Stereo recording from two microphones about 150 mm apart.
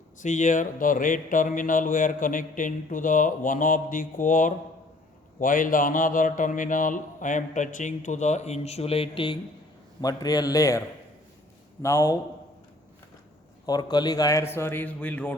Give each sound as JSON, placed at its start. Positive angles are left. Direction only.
{"t": 0.2, "sound": "speech", "side_deg": 55}
{"t": 10.0, "sound": "a man's voice", "side_deg": 25}
{"t": 13.7, "sound": "a man's voice", "side_deg": 25}